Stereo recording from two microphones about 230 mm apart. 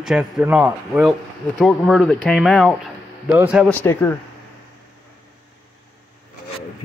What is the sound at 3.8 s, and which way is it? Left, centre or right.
Speech, centre.